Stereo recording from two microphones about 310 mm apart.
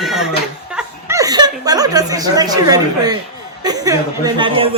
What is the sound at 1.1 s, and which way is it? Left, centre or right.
Speech, centre.